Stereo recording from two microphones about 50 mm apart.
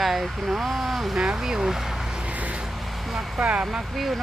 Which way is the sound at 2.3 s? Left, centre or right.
Right.